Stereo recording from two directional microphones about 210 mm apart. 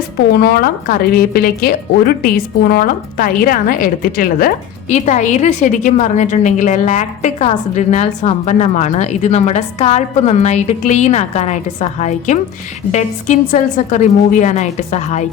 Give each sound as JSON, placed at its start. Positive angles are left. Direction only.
{"t": 0.3, "sound": "a woman's voice", "side_deg": 45}